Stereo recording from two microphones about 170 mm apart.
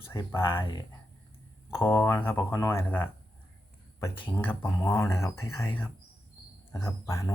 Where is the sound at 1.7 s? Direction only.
15° left (ahead or behind).